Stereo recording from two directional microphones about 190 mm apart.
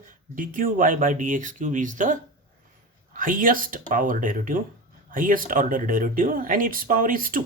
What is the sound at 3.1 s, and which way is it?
Speech, 45° right (ahead or behind).